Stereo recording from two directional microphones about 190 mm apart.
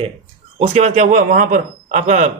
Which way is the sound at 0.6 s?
35° right (ahead or behind).